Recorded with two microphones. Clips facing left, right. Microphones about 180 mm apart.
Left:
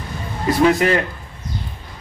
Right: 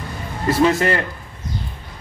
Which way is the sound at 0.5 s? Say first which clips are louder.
Left 1 dB; 15° left (ahead or behind).